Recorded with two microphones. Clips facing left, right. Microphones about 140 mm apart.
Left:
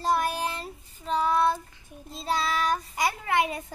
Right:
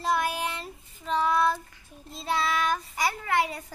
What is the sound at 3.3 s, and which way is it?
Child singing, 20° left (ahead or behind).